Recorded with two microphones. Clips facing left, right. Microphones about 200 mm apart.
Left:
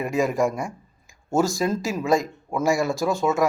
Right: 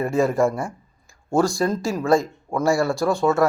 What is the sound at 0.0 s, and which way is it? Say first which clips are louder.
Speech: right 3 dB; 15° left (ahead or behind).